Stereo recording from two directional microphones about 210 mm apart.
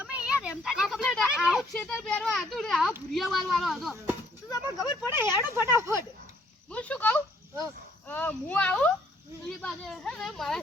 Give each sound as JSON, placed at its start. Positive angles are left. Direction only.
{"t": 0.0, "sound": "a sound", "side_deg": -5}
{"t": 3.1, "sound": "speech", "side_deg": 0}
{"t": 4.5, "sound": "speech", "side_deg": 15}
{"t": 5.2, "sound": "speech", "side_deg": -10}
{"t": 6.7, "sound": "speech", "side_deg": 5}